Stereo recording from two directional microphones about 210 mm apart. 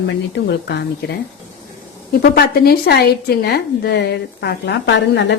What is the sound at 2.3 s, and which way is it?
A woman's voice, 45° left (ahead or behind).